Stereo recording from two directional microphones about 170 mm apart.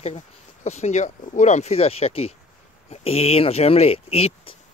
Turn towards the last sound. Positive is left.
turn(degrees=35)  # may be behind; listen again after turning